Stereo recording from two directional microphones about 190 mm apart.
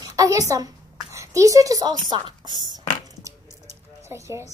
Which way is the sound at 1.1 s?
15° right (ahead or behind).